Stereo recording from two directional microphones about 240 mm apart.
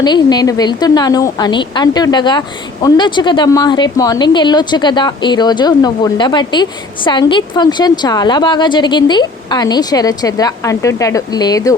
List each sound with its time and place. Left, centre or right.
0.0 s a woman's voice: centre